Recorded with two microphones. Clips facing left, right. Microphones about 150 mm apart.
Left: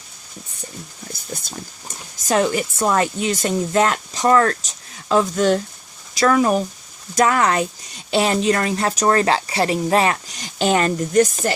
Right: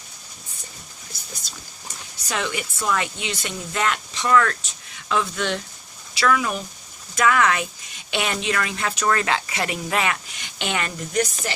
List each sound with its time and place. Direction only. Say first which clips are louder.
2.2 s speech: left 9 dB; 40° left (ahead or behind)